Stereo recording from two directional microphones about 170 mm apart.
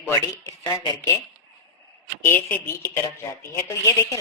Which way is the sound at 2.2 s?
10° left (ahead or behind).